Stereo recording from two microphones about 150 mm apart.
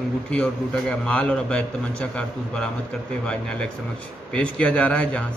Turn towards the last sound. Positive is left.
turn(degrees=10)  # may be behind; listen again after turning